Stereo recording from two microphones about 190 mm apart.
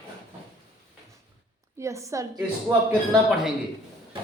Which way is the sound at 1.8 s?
15° right (ahead or behind).